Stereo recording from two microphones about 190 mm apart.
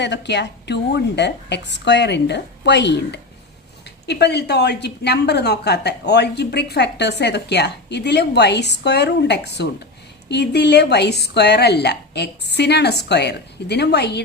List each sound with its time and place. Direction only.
0.0 s a woman's voice: 65° left (ahead or behind)